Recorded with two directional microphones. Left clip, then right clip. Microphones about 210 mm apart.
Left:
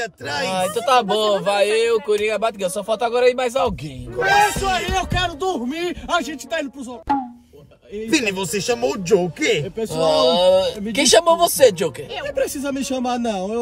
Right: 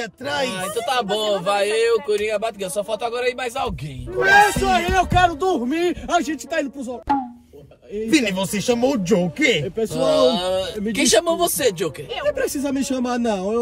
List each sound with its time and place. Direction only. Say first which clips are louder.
0.2 s speech: right 3 dB; 10° right (ahead or behind)
0.6 s speech: left 5 dB; 25° left (ahead or behind)
4.2 s a man's voice: right 2 dB; centre (ahead or behind)
8.1 s speech: even; 10° right (ahead or behind)
9.9 s speech: left 2 dB; 25° left (ahead or behind)
12.3 s a man's voice: right 1 dB; 5° left (ahead or behind)